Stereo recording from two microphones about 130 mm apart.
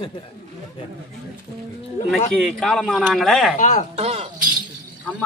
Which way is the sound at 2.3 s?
5° left (ahead or behind).